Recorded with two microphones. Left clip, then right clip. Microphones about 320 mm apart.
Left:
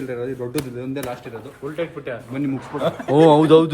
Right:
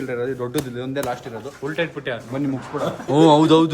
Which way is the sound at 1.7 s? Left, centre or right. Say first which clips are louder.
Right 2 dB; right.